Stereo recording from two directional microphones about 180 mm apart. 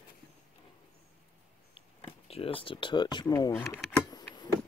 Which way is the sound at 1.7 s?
30° left (ahead or behind).